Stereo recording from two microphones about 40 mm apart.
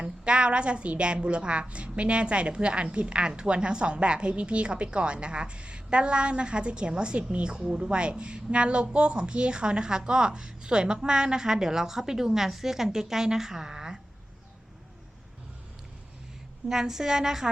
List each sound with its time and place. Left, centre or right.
0.0 s a woman's voice: right
16.6 s a woman's voice: centre